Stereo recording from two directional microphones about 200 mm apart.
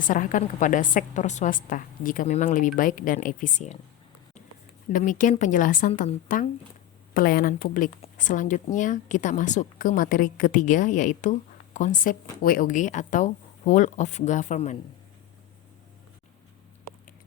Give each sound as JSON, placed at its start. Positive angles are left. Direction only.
{"t": 0.1, "sound": "speech", "side_deg": 40}
{"t": 4.9, "sound": "speech", "side_deg": 40}
{"t": 7.1, "sound": "a woman's voice", "side_deg": 45}